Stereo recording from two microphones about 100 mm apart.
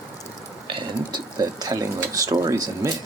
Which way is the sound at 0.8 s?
45° right (ahead or behind).